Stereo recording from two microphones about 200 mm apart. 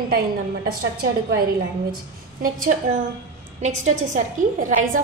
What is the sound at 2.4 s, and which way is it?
A woman's voice, 45° right (ahead or behind).